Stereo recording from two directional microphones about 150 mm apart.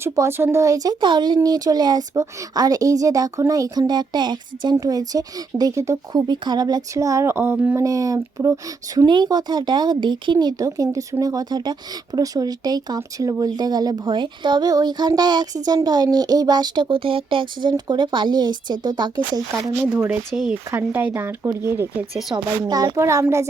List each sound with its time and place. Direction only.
0.0 s speech: 15° right (ahead or behind)
20.3 s speech: centre (ahead or behind)
20.7 s speech: 15° right (ahead or behind)